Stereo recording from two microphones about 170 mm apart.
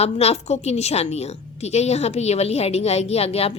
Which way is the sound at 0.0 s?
40° left (ahead or behind).